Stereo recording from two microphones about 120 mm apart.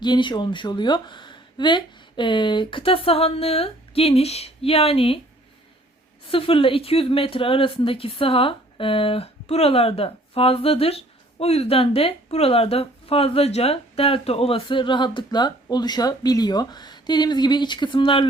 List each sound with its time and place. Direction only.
0.0 s speech: 40° left (ahead or behind)
6.2 s speech: 50° left (ahead or behind)